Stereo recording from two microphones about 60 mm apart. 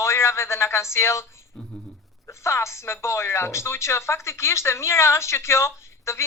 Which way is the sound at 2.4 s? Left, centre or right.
Left.